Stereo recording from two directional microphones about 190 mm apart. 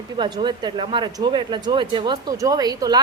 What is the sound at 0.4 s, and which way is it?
A woman's voice, 25° right (ahead or behind).